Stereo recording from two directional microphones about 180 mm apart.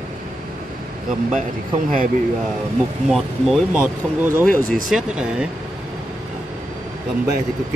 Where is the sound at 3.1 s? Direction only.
5° right (ahead or behind).